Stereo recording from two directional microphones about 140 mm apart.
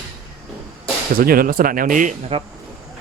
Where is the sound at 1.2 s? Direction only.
90° right; by 2.1 s 70° right (ahead or behind).